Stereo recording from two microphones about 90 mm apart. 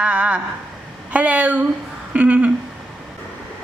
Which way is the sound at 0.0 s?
15° right (ahead or behind).